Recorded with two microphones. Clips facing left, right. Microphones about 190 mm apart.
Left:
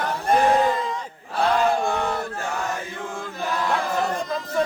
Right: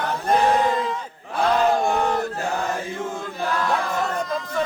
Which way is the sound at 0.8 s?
5° right (ahead or behind).